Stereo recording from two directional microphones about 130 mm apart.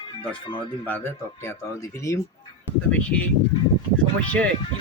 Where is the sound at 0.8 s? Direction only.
15° left (ahead or behind).